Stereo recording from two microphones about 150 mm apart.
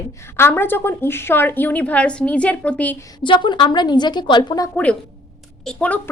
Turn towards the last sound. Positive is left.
turn(degrees=10)  # may be behind; listen again after turning